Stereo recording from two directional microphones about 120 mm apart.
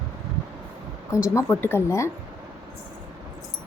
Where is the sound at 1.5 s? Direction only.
20° left (ahead or behind).